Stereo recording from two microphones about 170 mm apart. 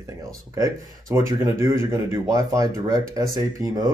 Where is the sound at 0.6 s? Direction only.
20° right (ahead or behind).